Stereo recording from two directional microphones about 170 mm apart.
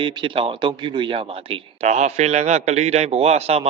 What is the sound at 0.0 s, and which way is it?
A man's voice, 30° right (ahead or behind).